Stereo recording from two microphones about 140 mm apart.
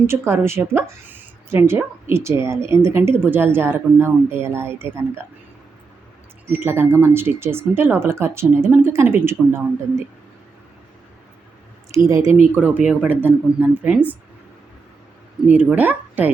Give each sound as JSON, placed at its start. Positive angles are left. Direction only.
{"t": 0.1, "sound": "a woman's voice", "side_deg": -20}
{"t": 6.6, "sound": "a woman's voice", "side_deg": -20}
{"t": 12.0, "sound": "a woman's voice", "side_deg": -20}
{"t": 15.4, "sound": "a woman's voice", "side_deg": -10}